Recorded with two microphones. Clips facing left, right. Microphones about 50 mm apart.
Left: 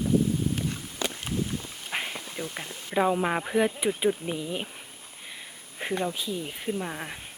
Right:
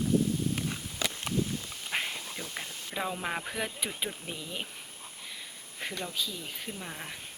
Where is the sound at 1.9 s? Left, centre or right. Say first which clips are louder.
Left 2 dB; centre.